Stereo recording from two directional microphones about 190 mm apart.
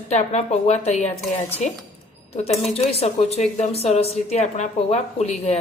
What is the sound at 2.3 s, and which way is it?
Dishes, 35° left (ahead or behind).